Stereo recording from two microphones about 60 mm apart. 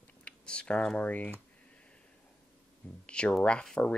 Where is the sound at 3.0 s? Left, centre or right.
Centre.